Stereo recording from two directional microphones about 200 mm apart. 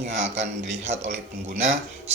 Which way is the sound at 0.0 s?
35° right (ahead or behind).